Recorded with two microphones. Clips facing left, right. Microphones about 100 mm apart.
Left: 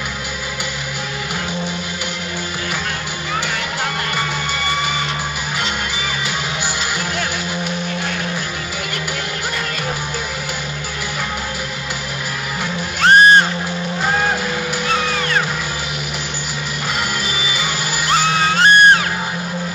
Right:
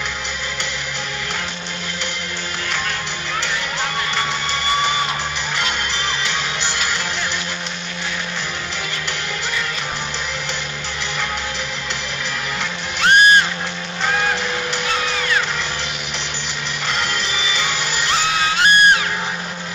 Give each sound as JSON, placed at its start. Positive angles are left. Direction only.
{"t": 13.0, "sound": "music", "side_deg": 35}
{"t": 17.4, "sound": "music", "side_deg": 10}
{"t": 18.5, "sound": "music", "side_deg": 35}